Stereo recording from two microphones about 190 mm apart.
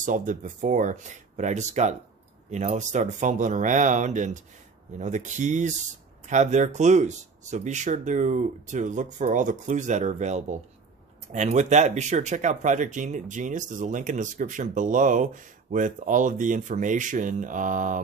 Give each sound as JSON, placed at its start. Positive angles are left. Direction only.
{"t": 0.0, "sound": "speech", "side_deg": -45}